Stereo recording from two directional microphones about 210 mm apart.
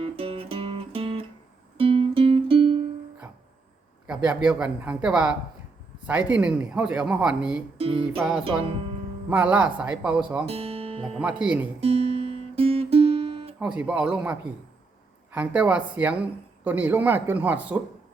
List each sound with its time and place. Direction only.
0.2 s music: 25° right (ahead or behind)
4.0 s speech: 5° right (ahead or behind)
7.8 s music: 25° right (ahead or behind)
9.3 s speech: 5° right (ahead or behind)
10.4 s speech: 30° right (ahead or behind)
11.2 s speech: 5° right (ahead or behind)
11.8 s music: 30° right (ahead or behind)
13.6 s speech: 5° right (ahead or behind)